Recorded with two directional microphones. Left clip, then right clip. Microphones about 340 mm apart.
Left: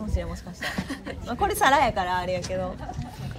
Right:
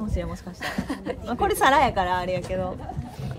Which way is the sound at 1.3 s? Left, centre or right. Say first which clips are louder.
Right 1 dB; centre.